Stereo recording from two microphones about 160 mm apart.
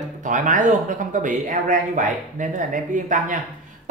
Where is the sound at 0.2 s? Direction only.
50° right (ahead or behind).